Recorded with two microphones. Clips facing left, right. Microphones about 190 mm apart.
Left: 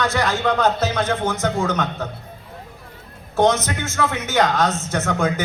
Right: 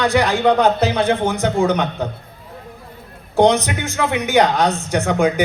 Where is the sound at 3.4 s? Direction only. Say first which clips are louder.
Right 4 dB; 15° right (ahead or behind).